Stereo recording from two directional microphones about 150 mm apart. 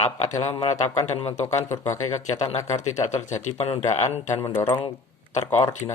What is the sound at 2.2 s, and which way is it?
A man's voice, 50° left (ahead or behind).